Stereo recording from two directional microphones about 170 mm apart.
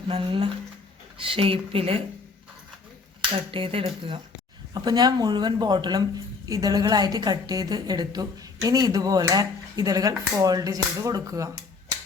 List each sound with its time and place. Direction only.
0.1 s speech: 30° right (ahead or behind)
3.5 s a woman's voice: 30° right (ahead or behind)